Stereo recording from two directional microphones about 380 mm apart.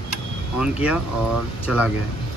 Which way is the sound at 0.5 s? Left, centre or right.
Centre.